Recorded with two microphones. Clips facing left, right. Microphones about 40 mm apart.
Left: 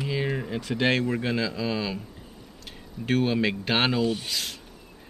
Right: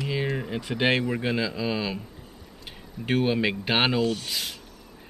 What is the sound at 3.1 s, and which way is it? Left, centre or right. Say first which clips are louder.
Speech: even; centre.